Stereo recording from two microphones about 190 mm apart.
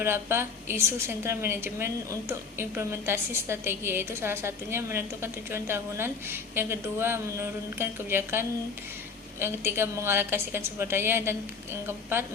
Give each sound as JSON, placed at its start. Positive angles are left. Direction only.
{"t": 0.0, "sound": "a woman's voice", "side_deg": -15}